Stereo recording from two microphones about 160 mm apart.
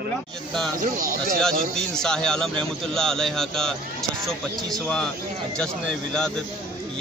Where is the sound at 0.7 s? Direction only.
55° right (ahead or behind).